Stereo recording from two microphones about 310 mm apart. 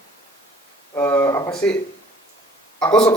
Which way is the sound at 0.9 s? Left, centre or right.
Centre.